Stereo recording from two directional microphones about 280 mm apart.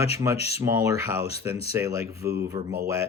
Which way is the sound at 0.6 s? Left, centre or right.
Centre.